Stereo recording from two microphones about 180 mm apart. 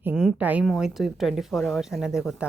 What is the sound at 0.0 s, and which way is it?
A woman's voice, 5° right (ahead or behind).